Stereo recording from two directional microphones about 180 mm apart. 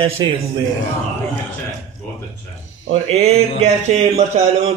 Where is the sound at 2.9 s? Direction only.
35° right (ahead or behind).